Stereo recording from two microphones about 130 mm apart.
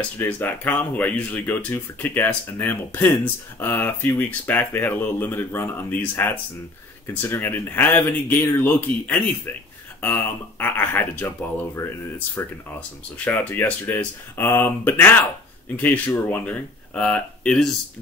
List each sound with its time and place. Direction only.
0.2 s speech: 15° left (ahead or behind)